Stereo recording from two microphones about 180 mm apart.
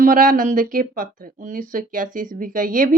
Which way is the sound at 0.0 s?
50° right (ahead or behind).